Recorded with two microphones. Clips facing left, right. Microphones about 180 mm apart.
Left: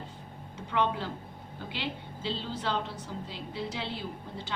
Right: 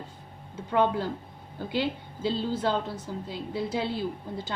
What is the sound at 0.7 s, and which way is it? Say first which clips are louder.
A woman's voice: right 5 dB; 45° right (ahead or behind).